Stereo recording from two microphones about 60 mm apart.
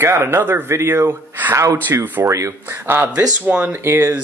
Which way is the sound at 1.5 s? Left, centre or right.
Right.